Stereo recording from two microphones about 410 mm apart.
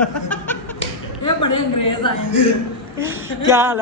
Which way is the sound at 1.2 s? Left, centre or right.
Left.